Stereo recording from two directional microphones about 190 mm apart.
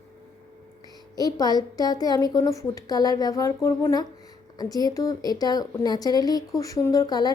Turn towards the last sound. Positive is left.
turn(degrees=20)  # may be behind; listen again after turning